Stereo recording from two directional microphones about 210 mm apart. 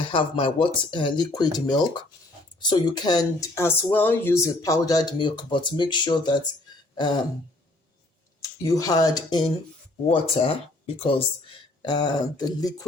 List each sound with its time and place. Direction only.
0.1 s speech: 25° left (ahead or behind)
6.9 s throat clearing: 20° left (ahead or behind)
8.4 s speech: 15° left (ahead or behind)